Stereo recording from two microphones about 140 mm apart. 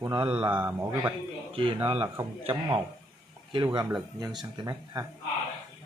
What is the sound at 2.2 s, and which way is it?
Speech, 15° right (ahead or behind).